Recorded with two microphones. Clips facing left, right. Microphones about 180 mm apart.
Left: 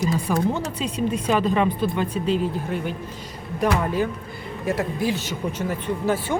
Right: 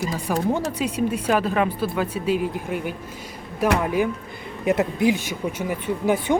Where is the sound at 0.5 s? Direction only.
10° right (ahead or behind).